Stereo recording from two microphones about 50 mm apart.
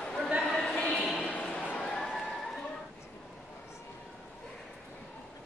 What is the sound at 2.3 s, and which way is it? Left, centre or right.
Horse, centre.